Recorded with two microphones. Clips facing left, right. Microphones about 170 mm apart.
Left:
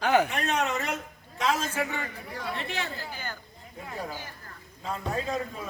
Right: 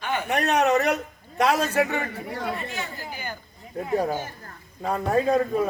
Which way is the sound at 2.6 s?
80° left.